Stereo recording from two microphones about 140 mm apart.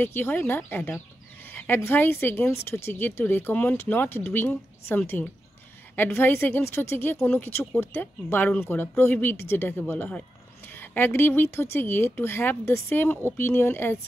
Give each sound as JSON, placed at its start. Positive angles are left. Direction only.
{"t": 0.0, "sound": "speech", "side_deg": 15}